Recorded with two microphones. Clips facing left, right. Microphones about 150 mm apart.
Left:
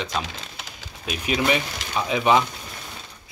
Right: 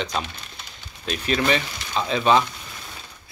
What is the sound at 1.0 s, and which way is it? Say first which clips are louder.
Speech: right 1 dB; 10° left (ahead or behind).